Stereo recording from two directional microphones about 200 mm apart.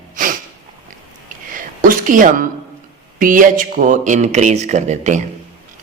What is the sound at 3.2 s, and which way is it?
Speech, 45° right (ahead or behind).